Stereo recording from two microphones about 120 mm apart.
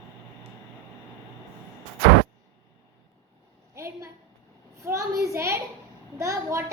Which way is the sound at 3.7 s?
25° right (ahead or behind).